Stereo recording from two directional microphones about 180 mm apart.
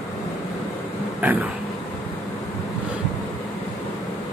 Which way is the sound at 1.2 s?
10° right (ahead or behind).